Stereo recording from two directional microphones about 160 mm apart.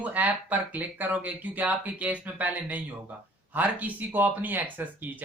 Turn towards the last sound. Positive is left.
turn(degrees=-10)  # may be behind; listen again after turning